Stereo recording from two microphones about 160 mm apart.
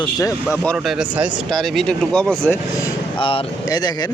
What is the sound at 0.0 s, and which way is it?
Speech, 20° left (ahead or behind).